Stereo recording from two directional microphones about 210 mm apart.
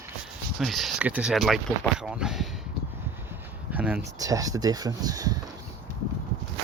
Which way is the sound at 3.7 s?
5° right (ahead or behind).